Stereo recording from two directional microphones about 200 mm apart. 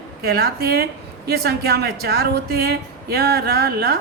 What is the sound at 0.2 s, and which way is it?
Speech, 50° right (ahead or behind).